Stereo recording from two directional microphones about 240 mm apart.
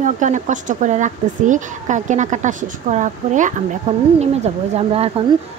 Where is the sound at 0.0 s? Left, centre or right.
Right.